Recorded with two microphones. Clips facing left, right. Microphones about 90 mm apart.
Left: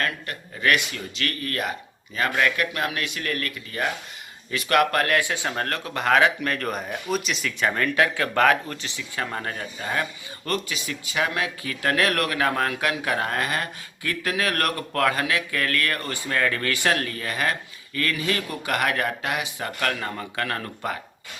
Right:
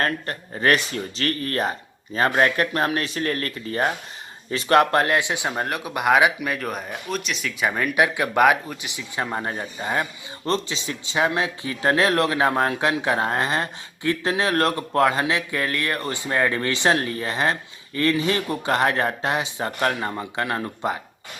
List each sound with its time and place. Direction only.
0.0 s speech: 35° right (ahead or behind); by 21.0 s 20° right (ahead or behind)